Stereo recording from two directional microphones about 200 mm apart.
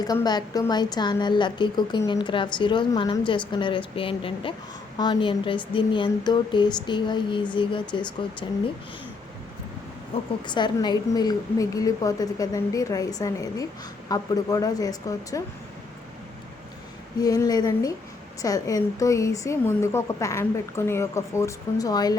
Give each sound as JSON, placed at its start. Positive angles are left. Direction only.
{"t": 0.0, "sound": "a woman's voice", "side_deg": 20}
{"t": 10.4, "sound": "a woman's voice", "side_deg": 20}
{"t": 17.2, "sound": "a woman's voice", "side_deg": 20}